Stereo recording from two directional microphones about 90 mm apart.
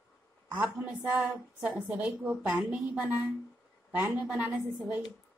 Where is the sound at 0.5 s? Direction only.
20° right (ahead or behind).